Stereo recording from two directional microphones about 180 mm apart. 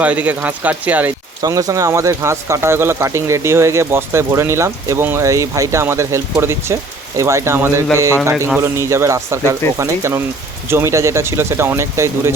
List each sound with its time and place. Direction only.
0.0 s speech: 10° right (ahead or behind)